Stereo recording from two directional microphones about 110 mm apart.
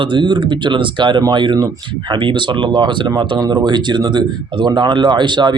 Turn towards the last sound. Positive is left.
turn(degrees=-45)  # may be behind; listen again after turning